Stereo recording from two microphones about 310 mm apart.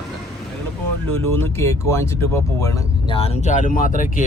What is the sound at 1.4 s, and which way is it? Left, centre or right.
Speech, centre.